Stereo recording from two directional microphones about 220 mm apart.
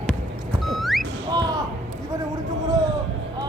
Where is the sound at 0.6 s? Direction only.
Centre (ahead or behind).